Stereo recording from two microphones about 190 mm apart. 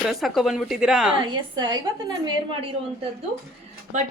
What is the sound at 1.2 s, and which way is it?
A woman's voice, 25° right (ahead or behind).